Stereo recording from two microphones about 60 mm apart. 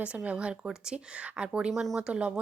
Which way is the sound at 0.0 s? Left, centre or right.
Centre.